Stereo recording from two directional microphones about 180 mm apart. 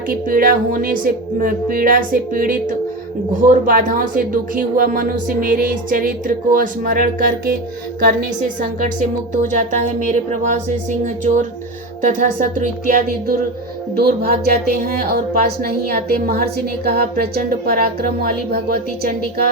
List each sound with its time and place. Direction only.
0.1 s speech: 50° right (ahead or behind)